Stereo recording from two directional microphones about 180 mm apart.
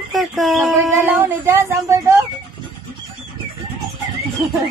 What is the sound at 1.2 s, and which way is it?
Speech, 15° right (ahead or behind).